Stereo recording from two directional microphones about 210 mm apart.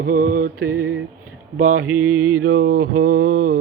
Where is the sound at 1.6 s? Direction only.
40° right (ahead or behind).